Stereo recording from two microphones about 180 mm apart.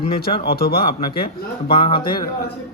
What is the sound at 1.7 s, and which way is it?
Speech, 30° left (ahead or behind).